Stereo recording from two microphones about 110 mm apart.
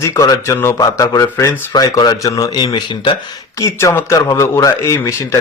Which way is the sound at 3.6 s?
30° left (ahead or behind).